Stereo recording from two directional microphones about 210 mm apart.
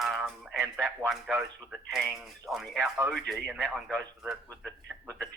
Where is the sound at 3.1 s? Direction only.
Centre (ahead or behind).